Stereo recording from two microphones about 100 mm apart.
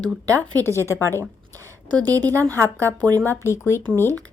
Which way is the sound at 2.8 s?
20° left (ahead or behind).